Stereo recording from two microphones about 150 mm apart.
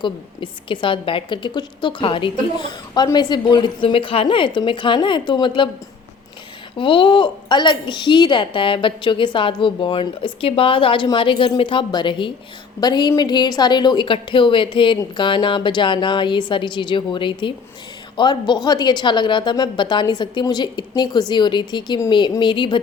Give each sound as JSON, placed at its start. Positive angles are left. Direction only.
{"t": 0.0, "sound": "a woman's voice", "side_deg": 30}
{"t": 6.7, "sound": "a woman's voice", "side_deg": 35}